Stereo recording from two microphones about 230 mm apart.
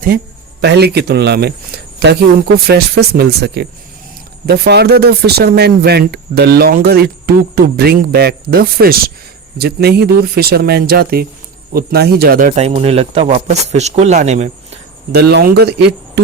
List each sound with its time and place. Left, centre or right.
0.6 s a man's voice: right
15.1 s speech: right